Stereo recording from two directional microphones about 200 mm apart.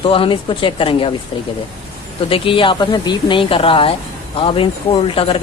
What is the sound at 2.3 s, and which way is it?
Speech, 25° left (ahead or behind).